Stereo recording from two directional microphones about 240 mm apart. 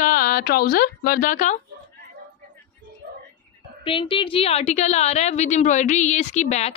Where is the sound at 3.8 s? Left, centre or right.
Left.